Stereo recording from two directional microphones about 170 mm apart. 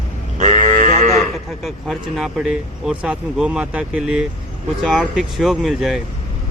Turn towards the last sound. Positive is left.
turn(degrees=0)  # may be behind; listen again after turning